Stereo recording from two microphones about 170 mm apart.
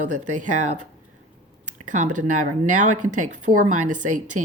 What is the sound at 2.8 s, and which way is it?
Speech, 45° right (ahead or behind).